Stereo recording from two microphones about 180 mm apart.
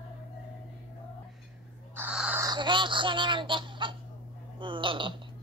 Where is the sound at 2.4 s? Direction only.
25° right (ahead or behind).